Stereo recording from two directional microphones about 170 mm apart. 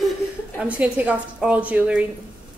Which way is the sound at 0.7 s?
5° right (ahead or behind).